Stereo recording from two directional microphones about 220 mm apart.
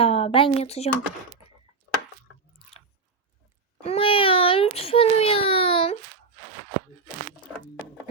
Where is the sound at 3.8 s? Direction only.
25° left (ahead or behind).